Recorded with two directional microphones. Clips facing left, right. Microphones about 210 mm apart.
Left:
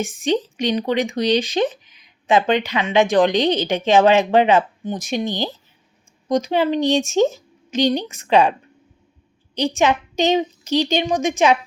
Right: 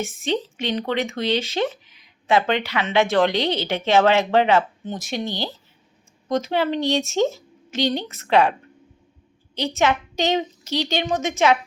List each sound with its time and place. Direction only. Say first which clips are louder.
0.0 s speech: left 4 dB; 15° left (ahead or behind)
9.6 s speech: left 3 dB; 15° left (ahead or behind)